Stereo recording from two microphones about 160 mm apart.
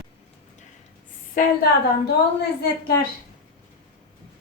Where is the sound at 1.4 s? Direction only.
60° left (ahead or behind).